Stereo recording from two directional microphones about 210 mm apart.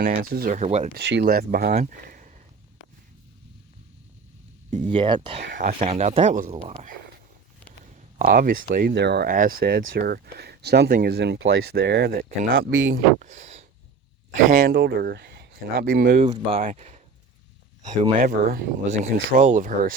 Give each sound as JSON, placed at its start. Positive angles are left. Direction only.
{"t": 0.2, "sound": "speech", "side_deg": -45}
{"t": 0.9, "sound": "speech", "side_deg": -55}
{"t": 1.2, "sound": "speech", "side_deg": -45}
{"t": 4.7, "sound": "speech", "side_deg": -25}
{"t": 8.2, "sound": "speech", "side_deg": -45}
{"t": 12.9, "sound": "speech", "side_deg": -35}
{"t": 16.3, "sound": "speech", "side_deg": -25}
{"t": 18.2, "sound": "speech", "side_deg": -45}